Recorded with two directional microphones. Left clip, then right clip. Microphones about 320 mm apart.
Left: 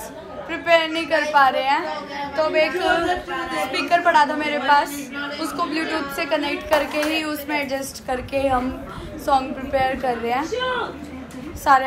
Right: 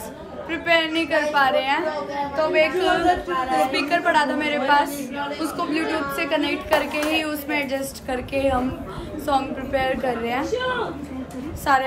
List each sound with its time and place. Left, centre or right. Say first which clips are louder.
0.5 s a woman's voice: left 2 dB; centre
11.7 s a woman's voice: left 4 dB; centre